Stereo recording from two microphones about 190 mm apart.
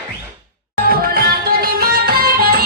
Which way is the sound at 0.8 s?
50° right (ahead or behind).